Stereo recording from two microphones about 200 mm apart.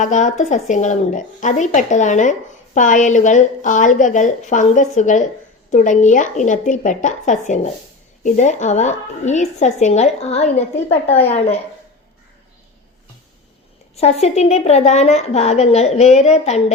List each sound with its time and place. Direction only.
0.0 s a woman's voice: 40° left (ahead or behind)
13.9 s a woman's voice: 30° left (ahead or behind)